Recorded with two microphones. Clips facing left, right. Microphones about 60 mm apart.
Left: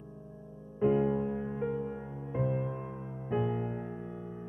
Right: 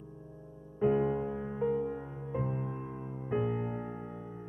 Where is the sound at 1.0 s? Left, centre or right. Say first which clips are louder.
Left 1 dB; centre.